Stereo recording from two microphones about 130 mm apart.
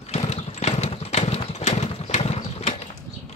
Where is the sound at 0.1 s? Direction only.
55° left (ahead or behind).